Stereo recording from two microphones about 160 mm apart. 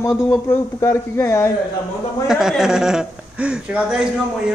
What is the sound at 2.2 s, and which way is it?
A man's voice, centre (ahead or behind).